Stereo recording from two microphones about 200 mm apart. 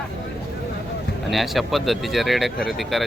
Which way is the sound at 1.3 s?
Centre (ahead or behind).